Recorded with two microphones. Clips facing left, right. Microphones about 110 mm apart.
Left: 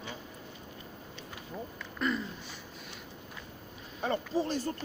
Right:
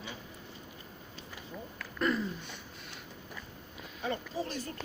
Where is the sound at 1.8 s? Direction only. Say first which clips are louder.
Right 2 dB; centre (ahead or behind).